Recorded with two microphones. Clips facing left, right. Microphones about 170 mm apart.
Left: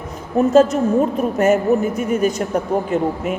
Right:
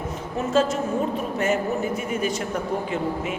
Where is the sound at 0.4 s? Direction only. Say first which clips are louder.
Left 9 dB; 35° left (ahead or behind).